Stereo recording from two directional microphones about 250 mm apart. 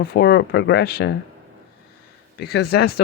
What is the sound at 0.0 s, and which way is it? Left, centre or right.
Speech, left.